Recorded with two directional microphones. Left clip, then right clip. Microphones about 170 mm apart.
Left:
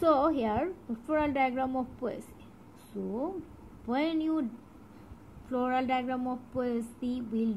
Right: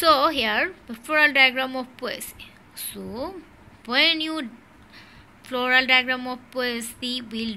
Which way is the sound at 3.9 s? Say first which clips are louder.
Right 11 dB; 5° left (ahead or behind).